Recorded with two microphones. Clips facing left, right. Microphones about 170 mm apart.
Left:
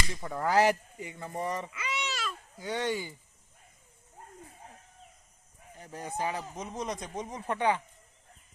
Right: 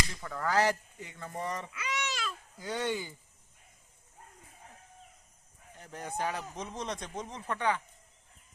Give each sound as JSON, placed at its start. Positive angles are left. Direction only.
{"t": 0.2, "sound": "speech", "side_deg": 20}
{"t": 2.6, "sound": "speech", "side_deg": 0}
{"t": 5.7, "sound": "speech", "side_deg": 5}